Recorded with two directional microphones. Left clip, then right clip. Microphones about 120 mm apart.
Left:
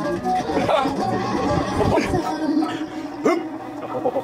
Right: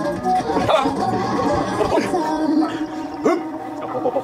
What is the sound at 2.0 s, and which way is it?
Chatter, centre (ahead or behind).